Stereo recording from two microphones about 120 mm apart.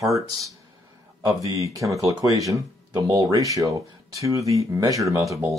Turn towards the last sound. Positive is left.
turn(degrees=-25)  # may be behind; listen again after turning